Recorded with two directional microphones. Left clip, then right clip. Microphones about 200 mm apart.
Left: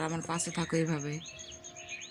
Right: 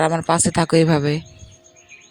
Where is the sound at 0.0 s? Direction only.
40° right (ahead or behind).